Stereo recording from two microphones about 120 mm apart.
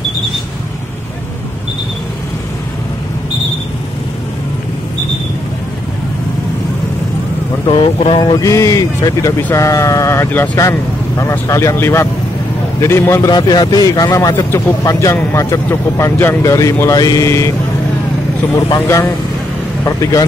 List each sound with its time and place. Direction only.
7.6 s speech: 45° left (ahead or behind); by 13.3 s 20° left (ahead or behind)
13.3 s speech: 35° left (ahead or behind)
18.8 s speech: 20° left (ahead or behind)